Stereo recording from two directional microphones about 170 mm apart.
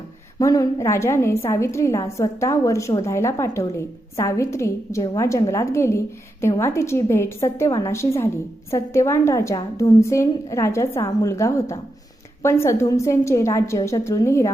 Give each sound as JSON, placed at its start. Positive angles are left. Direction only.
{"t": 0.3, "sound": "a woman's voice", "side_deg": 20}